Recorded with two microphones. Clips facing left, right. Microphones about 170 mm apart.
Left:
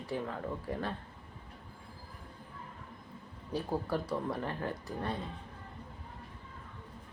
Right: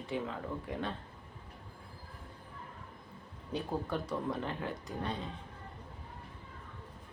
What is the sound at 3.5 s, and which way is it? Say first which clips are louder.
Speech: left 2 dB; 5° left (ahead or behind).